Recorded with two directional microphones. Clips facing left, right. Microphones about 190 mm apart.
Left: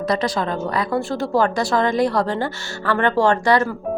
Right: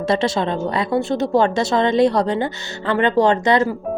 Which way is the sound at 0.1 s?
25° right (ahead or behind).